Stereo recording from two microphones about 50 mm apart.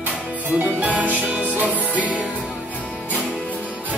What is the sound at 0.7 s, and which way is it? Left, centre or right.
Music, right.